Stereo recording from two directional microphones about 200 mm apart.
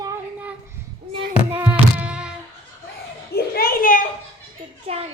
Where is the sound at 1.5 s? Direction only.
5° right (ahead or behind).